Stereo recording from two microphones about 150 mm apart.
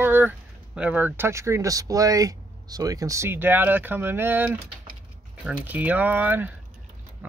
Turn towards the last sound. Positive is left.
turn(degrees=-10)  # may be behind; listen again after turning